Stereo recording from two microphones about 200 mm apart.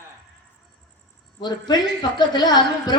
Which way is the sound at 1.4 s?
20° left (ahead or behind).